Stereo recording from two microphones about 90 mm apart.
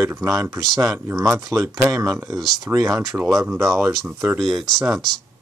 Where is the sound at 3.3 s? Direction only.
5° right (ahead or behind).